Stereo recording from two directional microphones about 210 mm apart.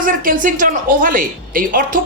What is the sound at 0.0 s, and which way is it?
A woman's voice, 40° right (ahead or behind).